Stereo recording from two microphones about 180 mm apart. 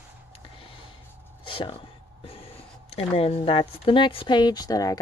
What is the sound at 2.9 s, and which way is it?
Speech, 35° left (ahead or behind).